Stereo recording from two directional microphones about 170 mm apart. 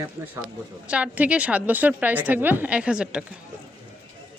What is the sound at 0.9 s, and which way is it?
A woman's voice, 10° right (ahead or behind).